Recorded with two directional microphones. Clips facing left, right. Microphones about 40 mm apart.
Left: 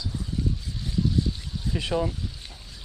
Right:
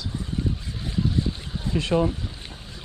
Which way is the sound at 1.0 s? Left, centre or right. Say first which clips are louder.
Even; right.